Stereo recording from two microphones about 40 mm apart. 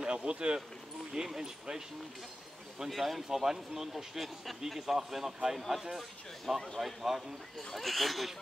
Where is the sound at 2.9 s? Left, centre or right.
Centre.